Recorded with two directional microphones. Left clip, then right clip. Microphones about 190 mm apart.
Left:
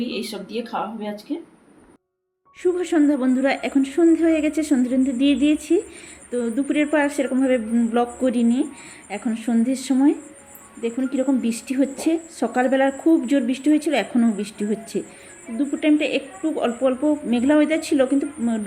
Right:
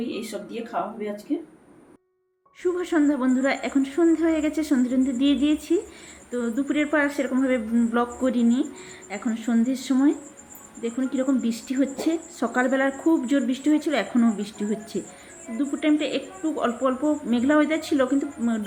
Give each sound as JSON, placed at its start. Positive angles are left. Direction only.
{"t": 0.1, "sound": "speech", "side_deg": 30}
{"t": 2.6, "sound": "a woman's voice", "side_deg": 15}